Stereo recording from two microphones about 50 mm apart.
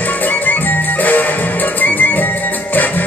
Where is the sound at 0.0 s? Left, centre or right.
Left.